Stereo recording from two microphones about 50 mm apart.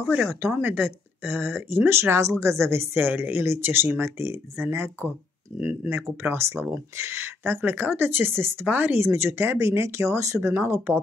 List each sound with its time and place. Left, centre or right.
0.0 s speech: right
0.4 s speech: right
1.9 s speech: right
8.6 s speech: right
10.5 s speech: right